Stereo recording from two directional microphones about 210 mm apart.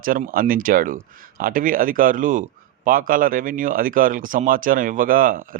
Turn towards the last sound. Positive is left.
turn(degrees=-40)  # may be behind; listen again after turning